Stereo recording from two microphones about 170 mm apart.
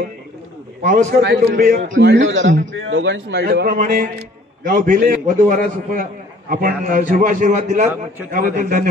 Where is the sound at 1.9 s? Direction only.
90° right.